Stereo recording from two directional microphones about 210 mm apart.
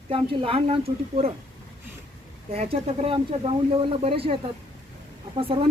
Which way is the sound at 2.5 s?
30° right (ahead or behind).